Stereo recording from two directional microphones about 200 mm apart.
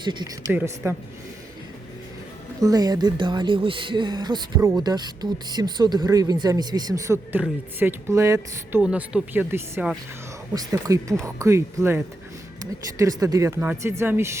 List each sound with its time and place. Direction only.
0.0 s speech: 20° right (ahead or behind)
0.5 s speech: 10° right (ahead or behind)
2.6 s speech: 20° right (ahead or behind)